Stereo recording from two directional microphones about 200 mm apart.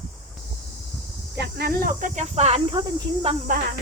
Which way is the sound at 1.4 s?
50° right (ahead or behind).